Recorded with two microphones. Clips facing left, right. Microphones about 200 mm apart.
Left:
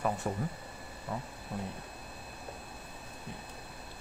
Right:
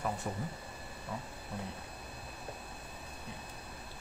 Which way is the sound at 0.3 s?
55° left (ahead or behind).